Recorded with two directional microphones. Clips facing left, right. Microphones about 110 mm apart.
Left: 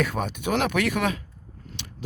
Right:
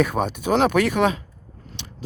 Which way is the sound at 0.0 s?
20° right (ahead or behind).